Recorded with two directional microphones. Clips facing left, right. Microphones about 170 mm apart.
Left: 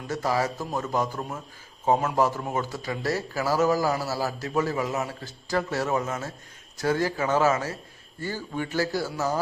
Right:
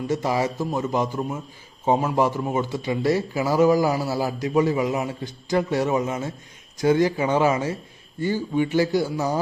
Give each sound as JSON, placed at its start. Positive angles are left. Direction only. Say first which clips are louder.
{"t": 0.1, "sound": "a man's voice", "louder": "right 2 dB", "side_deg": -15}